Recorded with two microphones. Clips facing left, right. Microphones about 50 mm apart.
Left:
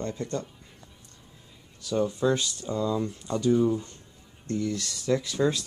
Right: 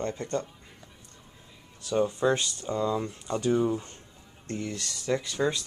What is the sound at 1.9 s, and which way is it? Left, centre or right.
Speech, right.